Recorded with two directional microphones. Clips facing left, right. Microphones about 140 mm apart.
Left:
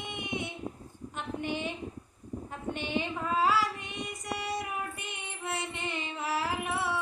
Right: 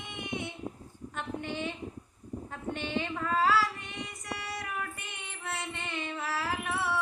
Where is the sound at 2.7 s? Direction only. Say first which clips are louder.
Left 1 dB; 15° left (ahead or behind).